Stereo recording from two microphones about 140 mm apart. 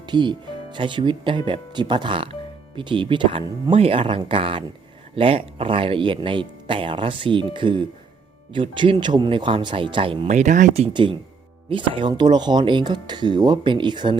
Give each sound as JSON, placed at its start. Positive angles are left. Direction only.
{"t": 0.0, "sound": "speech", "side_deg": -35}
{"t": 10.2, "sound": "speech", "side_deg": -60}
{"t": 10.9, "sound": "speech", "side_deg": -35}